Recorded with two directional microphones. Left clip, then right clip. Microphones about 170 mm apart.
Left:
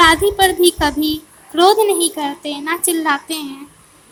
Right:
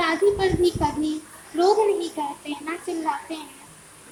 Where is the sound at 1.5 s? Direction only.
45° left (ahead or behind).